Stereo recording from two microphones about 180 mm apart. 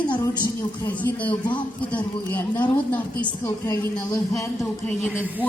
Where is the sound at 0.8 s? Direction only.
10° left (ahead or behind).